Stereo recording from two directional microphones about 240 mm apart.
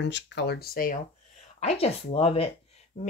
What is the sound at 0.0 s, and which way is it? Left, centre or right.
Speech, left.